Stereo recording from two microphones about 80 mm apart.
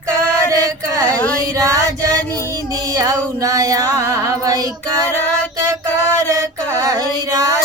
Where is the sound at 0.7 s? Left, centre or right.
Right.